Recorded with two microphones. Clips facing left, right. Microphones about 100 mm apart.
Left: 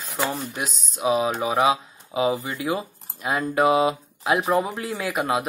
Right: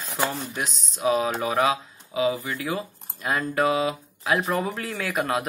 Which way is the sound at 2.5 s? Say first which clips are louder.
Left 3 dB; 15° left (ahead or behind).